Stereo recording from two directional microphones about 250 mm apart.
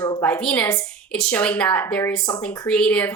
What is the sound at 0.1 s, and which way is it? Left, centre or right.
Speech, centre.